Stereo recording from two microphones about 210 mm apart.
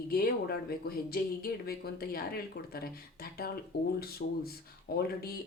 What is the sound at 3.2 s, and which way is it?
Speech, 45° left (ahead or behind).